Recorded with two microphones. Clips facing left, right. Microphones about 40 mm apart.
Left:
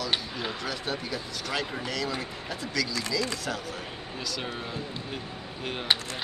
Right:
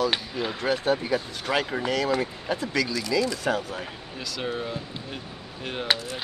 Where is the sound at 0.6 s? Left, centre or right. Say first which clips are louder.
Right 8 dB; right.